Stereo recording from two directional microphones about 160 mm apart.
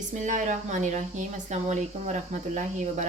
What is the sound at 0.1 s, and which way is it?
Speech, 50° right (ahead or behind).